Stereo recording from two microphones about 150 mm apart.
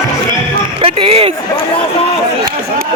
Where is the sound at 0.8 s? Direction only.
35° right (ahead or behind).